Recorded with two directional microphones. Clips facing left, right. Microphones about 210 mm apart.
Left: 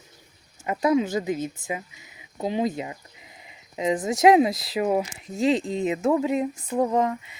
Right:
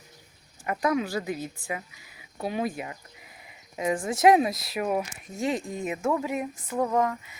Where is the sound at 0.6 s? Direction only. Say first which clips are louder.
Left 4 dB; 20° left (ahead or behind).